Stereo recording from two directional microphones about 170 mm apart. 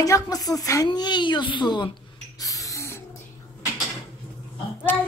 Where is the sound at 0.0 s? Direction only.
20° left (ahead or behind).